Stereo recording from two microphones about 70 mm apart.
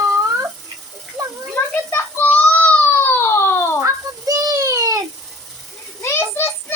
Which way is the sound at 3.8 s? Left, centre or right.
Right.